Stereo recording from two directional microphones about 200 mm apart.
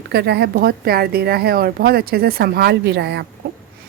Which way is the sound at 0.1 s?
55° right (ahead or behind).